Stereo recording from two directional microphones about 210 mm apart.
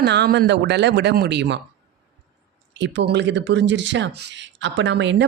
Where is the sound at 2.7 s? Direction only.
55° right (ahead or behind).